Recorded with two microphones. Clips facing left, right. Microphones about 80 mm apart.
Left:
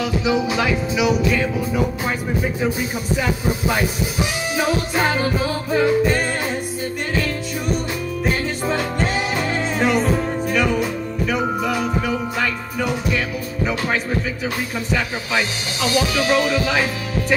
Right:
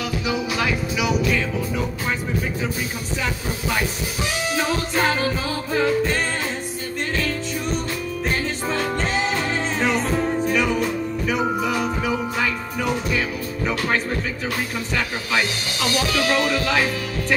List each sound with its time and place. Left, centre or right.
0.2 s music: centre
3.2 s speech: centre
4.6 s music: centre
15.3 s speech: centre